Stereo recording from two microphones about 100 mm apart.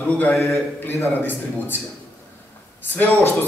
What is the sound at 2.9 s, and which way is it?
Speech, 20° left (ahead or behind).